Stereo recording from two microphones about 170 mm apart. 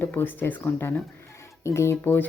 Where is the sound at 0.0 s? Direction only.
10° left (ahead or behind).